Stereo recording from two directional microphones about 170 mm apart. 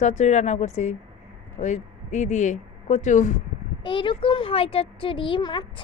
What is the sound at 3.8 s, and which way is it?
Speech, 30° left (ahead or behind).